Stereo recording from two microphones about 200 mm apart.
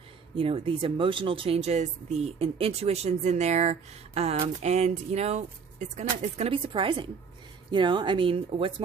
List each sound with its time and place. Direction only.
0.3 s a woman's voice: 25° right (ahead or behind)